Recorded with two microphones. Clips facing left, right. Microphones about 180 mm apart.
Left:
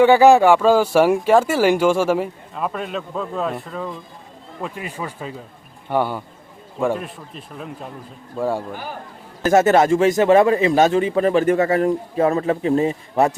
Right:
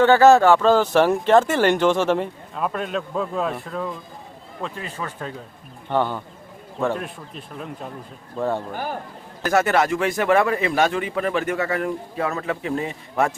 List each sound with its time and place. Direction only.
0.0 s speech: 15° left (ahead or behind)
4.6 s a man's voice: 15° left (ahead or behind)
9.4 s a man's voice: 25° left (ahead or behind)